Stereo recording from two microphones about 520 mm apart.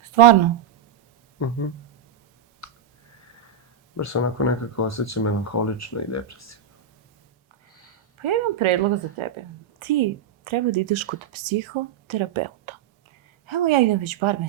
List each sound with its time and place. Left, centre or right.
0.0 s a sound: right
3.9 s speech: left
8.2 s speech: right